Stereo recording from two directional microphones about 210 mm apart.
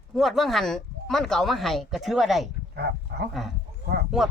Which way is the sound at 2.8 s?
50° right (ahead or behind).